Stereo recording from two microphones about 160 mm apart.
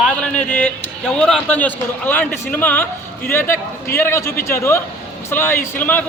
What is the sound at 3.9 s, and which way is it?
A man's voice, 15° left (ahead or behind).